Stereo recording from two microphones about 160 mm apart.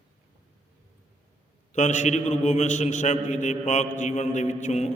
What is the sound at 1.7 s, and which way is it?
A man's voice, 50° left (ahead or behind).